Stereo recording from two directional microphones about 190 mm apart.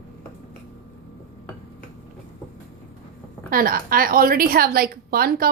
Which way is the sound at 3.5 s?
50° right (ahead or behind).